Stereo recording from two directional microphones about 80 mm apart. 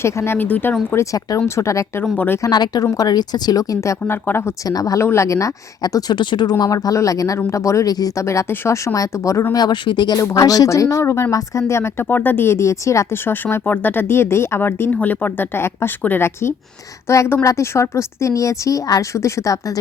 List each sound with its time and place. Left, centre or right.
0.0 s a woman's voice: left
0.5 s speech: left
1.5 s a woman's voice: left
2.1 s speech: left
2.5 s speech: left
2.8 s speech: left
4.0 s speech: left
4.6 s speech: left
5.0 s a woman's voice: left
8.2 s a woman's voice: left
9.5 s speech: left
10.2 s a woman's voice: left